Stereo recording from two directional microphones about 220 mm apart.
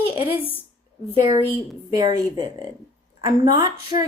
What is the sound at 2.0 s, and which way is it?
A woman's voice, 20° right (ahead or behind).